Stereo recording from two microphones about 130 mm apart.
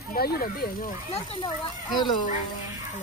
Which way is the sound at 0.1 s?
90° left.